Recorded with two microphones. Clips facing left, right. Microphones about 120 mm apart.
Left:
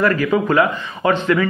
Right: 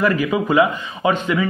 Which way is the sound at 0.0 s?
15° right (ahead or behind).